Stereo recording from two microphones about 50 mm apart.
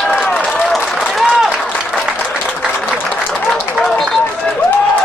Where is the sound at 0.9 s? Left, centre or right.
Centre.